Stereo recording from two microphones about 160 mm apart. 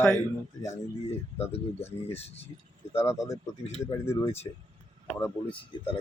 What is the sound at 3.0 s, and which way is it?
Speech, 15° left (ahead or behind).